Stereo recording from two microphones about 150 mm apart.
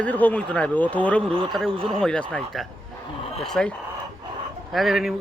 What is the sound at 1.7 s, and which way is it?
Speech, 35° right (ahead or behind).